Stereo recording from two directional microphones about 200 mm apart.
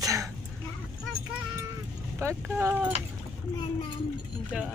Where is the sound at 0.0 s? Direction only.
15° right (ahead or behind).